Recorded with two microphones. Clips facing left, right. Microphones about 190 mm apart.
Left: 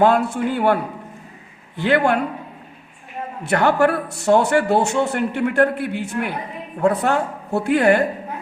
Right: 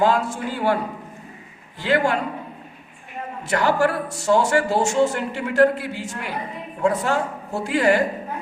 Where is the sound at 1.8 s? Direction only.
60° left (ahead or behind).